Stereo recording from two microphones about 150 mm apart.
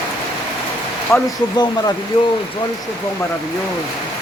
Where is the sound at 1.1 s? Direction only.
20° left (ahead or behind).